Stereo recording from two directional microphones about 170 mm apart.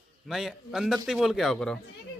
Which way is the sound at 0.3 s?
Centre (ahead or behind).